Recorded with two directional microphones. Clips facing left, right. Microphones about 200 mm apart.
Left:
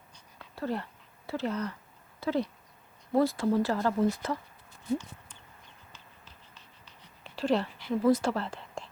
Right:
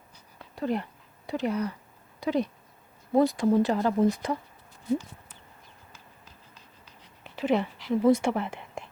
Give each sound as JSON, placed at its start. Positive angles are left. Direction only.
{"t": 0.5, "sound": "speech", "side_deg": -15}
{"t": 7.4, "sound": "speech", "side_deg": -15}